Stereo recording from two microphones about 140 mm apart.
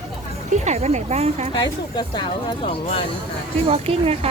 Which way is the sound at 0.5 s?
55° right (ahead or behind).